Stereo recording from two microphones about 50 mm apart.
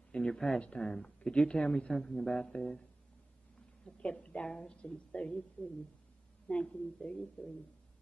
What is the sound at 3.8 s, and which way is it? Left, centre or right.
A woman's voice, left.